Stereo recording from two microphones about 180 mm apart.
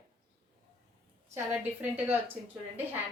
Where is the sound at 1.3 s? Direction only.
10° right (ahead or behind).